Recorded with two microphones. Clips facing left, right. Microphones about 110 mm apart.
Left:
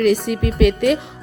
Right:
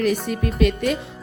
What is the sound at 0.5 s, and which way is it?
Speech, 85° left.